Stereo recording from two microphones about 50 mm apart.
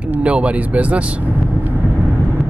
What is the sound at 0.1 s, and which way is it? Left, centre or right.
Speech, right.